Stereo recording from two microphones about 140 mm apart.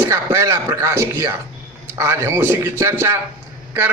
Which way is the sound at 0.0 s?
20° right (ahead or behind).